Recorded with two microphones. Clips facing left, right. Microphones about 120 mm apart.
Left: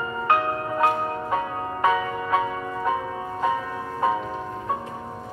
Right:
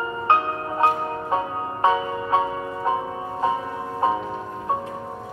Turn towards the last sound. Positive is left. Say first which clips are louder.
# right 1 dB
turn(degrees=-25)  # may be behind; listen again after turning